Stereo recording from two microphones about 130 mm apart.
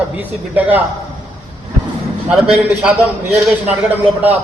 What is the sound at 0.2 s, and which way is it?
Speech, 15° right (ahead or behind).